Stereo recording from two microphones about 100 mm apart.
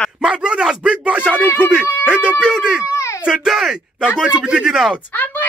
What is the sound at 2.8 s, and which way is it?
Speech, 30° left (ahead or behind).